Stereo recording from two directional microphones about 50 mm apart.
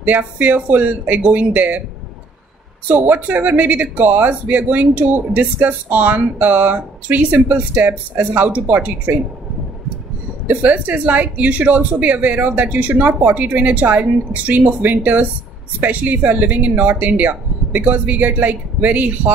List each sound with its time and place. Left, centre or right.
0.0 s speech: right
2.9 s speech: right
10.5 s speech: right